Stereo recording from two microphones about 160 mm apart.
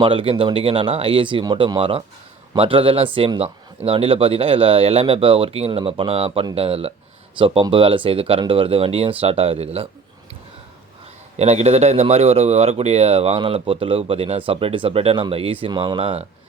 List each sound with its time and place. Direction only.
0.0 s speech: 35° right (ahead or behind)
11.3 s speech: 40° right (ahead or behind)